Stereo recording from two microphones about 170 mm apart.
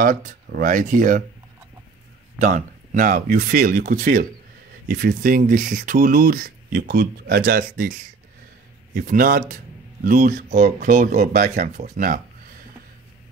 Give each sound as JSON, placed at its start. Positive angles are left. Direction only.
{"t": 0.0, "sound": "speech", "side_deg": -50}
{"t": 2.4, "sound": "speech", "side_deg": -50}
{"t": 8.9, "sound": "speech", "side_deg": -55}